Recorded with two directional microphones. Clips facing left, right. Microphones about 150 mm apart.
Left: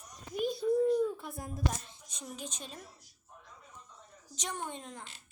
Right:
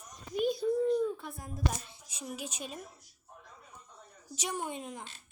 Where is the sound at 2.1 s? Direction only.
5° right (ahead or behind).